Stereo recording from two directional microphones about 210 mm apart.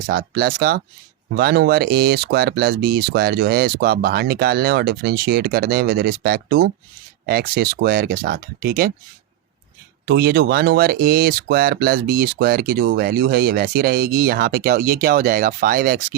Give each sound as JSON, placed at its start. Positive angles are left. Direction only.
{"t": 0.1, "sound": "speech", "side_deg": -45}
{"t": 10.1, "sound": "speech", "side_deg": -50}